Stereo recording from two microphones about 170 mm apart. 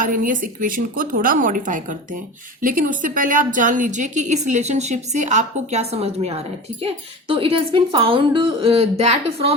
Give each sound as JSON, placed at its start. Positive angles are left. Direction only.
{"t": 0.0, "sound": "a woman's voice", "side_deg": -55}